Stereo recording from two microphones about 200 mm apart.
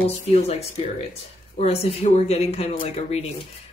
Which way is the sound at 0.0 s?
30° left (ahead or behind).